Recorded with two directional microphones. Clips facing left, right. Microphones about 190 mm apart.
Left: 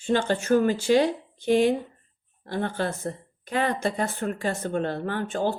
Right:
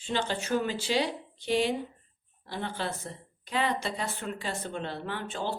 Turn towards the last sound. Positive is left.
turn(degrees=45)  # may be behind; listen again after turning